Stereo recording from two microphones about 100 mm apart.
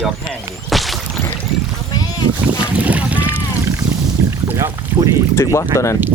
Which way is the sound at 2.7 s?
15° right (ahead or behind).